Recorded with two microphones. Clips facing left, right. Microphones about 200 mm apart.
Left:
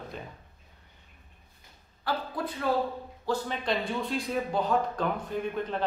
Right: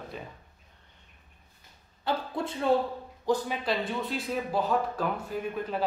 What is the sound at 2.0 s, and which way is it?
Speech, 25° right (ahead or behind).